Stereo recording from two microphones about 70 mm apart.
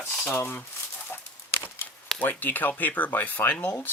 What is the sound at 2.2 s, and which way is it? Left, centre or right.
Speech, left.